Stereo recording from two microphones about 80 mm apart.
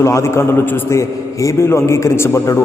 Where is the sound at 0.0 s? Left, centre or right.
Left.